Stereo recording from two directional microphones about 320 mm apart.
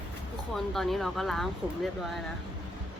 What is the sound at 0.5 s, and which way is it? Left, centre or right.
Speech, centre.